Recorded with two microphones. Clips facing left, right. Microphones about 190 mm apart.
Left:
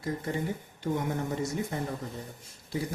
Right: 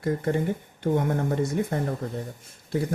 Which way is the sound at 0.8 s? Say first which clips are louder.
Right 6 dB; 55° right (ahead or behind).